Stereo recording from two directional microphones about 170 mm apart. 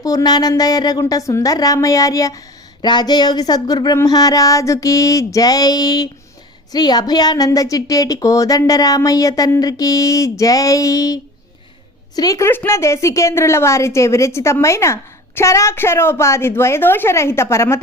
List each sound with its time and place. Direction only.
0.0 s a woman's voice: 20° left (ahead or behind)